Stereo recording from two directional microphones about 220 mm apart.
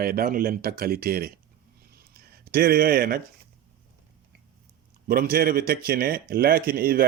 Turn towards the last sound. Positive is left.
turn(degrees=-45)  # may be behind; listen again after turning